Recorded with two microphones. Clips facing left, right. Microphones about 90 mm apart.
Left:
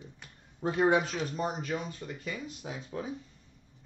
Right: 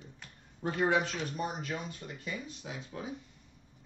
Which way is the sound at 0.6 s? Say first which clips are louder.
Left 4 dB; 25° left (ahead or behind).